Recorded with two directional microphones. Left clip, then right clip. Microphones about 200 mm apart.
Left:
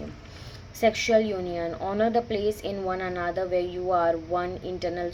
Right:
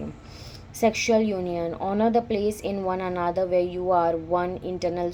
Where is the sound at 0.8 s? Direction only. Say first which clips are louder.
Even; 25° right (ahead or behind).